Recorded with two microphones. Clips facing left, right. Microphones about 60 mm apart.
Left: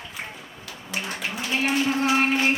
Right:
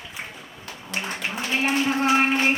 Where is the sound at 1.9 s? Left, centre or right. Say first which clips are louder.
Right 2 dB; centre.